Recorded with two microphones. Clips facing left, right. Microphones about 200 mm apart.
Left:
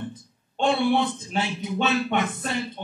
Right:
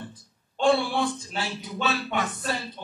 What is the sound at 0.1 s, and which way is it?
A man's voice, 20° left (ahead or behind).